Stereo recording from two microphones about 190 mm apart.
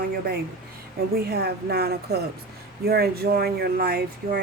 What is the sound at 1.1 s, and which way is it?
Speech, 55° right (ahead or behind).